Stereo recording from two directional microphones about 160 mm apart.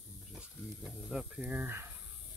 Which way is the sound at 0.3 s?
5° right (ahead or behind).